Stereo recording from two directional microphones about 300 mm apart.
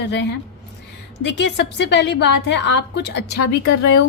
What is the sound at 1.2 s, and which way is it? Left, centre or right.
A woman's voice, left.